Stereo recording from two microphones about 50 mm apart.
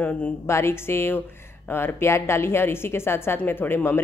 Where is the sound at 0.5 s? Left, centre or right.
Left.